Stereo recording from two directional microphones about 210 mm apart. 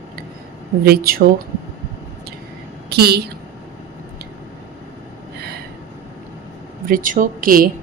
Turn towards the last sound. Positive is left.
turn(degrees=-40)  # may be behind; listen again after turning